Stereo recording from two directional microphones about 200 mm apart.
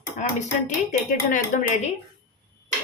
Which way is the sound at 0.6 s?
40° left (ahead or behind).